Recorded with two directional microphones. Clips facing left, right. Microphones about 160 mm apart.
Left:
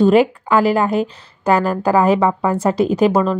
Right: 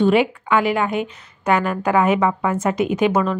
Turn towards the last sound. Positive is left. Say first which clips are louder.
# left 3 dB
turn(degrees=35)  # may be behind; listen again after turning